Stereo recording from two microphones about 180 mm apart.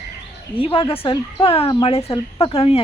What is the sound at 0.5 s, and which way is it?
Speech, 30° left (ahead or behind).